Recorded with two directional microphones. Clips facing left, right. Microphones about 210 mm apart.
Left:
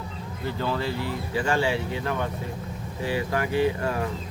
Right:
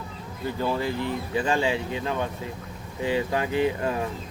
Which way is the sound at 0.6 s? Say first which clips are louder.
Right 2 dB; 15° right (ahead or behind).